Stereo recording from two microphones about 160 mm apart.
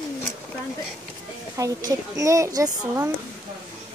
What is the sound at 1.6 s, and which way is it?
A woman's voice, 20° right (ahead or behind).